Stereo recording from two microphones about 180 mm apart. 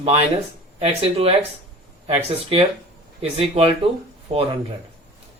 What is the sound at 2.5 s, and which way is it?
Speech, 30° right (ahead or behind).